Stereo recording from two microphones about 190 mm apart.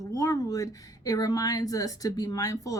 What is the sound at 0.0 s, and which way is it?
Speech, 15° left (ahead or behind).